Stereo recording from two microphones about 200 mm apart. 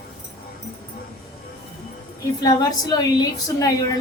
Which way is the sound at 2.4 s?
20° left (ahead or behind).